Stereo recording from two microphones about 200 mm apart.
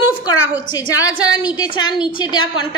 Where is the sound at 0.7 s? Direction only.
15° left (ahead or behind).